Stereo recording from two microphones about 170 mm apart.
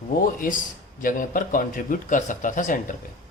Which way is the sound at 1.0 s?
55° left (ahead or behind).